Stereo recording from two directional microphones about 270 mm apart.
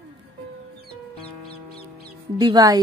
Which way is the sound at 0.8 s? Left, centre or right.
Right.